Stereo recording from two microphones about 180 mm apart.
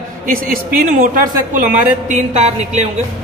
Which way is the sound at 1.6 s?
45° right (ahead or behind).